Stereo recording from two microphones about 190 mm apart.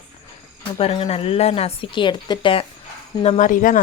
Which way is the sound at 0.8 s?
30° left (ahead or behind).